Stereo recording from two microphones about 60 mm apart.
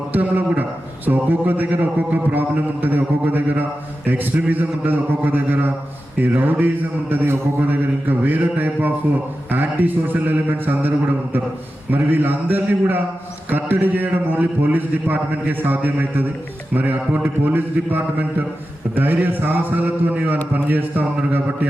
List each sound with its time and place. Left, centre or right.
0.1 s a man's voice: right
2.8 s a man's voice: right